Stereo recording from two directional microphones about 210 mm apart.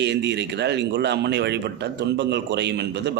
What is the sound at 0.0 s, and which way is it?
A man's voice, 55° right (ahead or behind).